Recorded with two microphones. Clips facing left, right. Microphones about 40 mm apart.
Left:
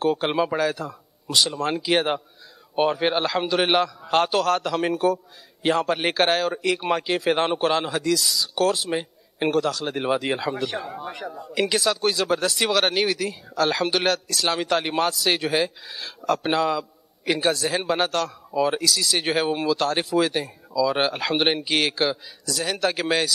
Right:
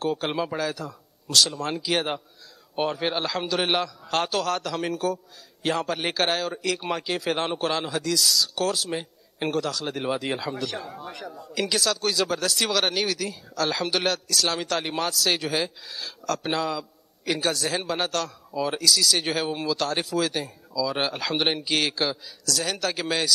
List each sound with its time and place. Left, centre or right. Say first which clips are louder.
0.0 s a man's voice: left 5 dB; centre
5.0 s speech: left 5 dB; centre
8.8 s a sound: left 4 dB; left
9.5 s speech: left 4 dB; centre
10.4 s speech: left 4 dB; centre